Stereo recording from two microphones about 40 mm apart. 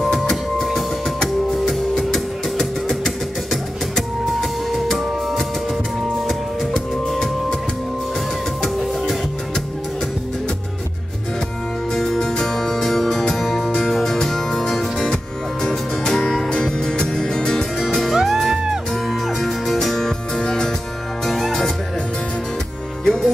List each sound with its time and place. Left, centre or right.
0.0 s music: centre
4.4 s music: centre
6.2 s music: centre
11.9 s music: centre
14.0 s music: centre
18.0 s music: centre
23.0 s music: centre